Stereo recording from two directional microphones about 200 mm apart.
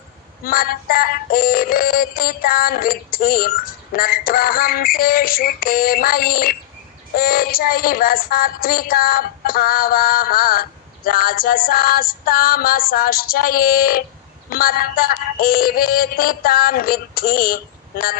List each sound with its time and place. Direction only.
0.4 s child singing: 45° left (ahead or behind)